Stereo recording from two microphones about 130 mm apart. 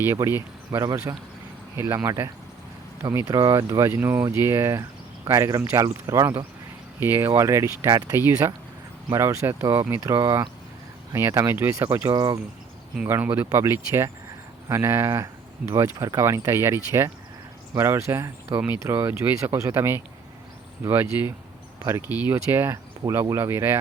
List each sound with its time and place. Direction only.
0.3 s speech: 20° right (ahead or behind)
12.1 s speech: 30° right (ahead or behind)
13.1 s speech: 15° right (ahead or behind)